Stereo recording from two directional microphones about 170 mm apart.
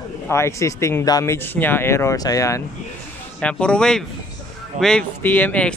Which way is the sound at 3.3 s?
5° left (ahead or behind).